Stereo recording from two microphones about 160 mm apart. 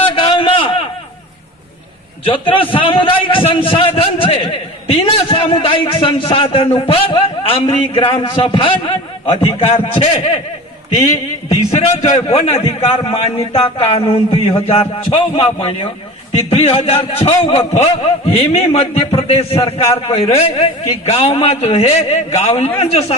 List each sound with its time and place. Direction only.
0.1 s a sound: 35° left (ahead or behind)
2.2 s a man's voice: 35° left (ahead or behind)
11.4 s a man's voice: 40° left (ahead or behind)